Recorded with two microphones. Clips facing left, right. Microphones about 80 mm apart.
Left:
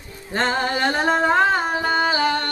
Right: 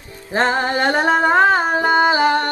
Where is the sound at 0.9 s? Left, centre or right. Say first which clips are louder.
Right 4 dB; centre.